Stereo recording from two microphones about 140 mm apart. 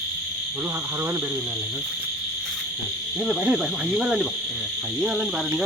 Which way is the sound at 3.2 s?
5° right (ahead or behind).